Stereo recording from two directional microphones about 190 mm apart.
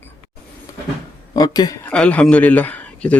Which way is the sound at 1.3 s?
20° left (ahead or behind).